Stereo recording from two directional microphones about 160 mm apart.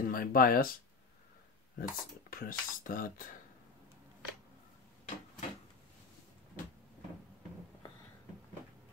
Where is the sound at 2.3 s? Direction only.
65° left (ahead or behind).